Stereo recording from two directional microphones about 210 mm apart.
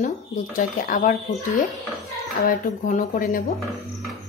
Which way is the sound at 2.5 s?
40° left (ahead or behind).